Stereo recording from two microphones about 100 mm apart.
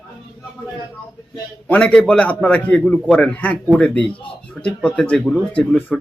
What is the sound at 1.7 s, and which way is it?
Speech, 15° left (ahead or behind).